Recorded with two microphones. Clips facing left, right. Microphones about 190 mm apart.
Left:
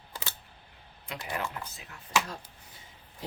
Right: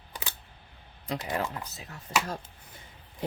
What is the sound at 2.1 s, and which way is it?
Speech, 40° right (ahead or behind).